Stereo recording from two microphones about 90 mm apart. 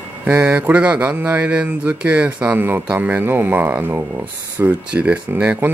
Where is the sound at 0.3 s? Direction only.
15° right (ahead or behind).